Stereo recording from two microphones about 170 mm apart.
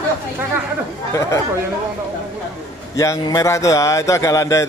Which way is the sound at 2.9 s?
20° left (ahead or behind).